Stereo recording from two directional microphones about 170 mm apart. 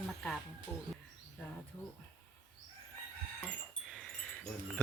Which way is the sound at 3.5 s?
5° left (ahead or behind).